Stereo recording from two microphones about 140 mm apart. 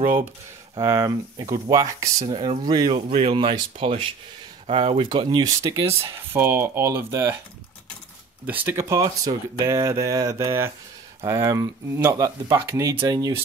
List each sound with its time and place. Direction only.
0.0 s speech: 15° right (ahead or behind)
0.7 s speech: 25° right (ahead or behind)
8.5 s speech: 15° right (ahead or behind)
12.9 s speech: 30° right (ahead or behind)